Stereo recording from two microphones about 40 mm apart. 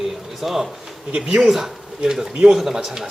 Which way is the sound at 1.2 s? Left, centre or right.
Centre.